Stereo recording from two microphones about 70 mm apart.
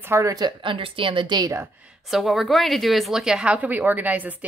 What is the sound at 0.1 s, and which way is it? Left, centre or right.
Speech, right.